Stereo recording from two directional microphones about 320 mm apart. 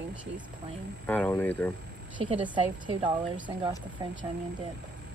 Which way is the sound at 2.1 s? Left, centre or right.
Centre.